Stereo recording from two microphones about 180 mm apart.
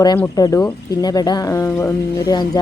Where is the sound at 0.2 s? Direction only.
20° left (ahead or behind).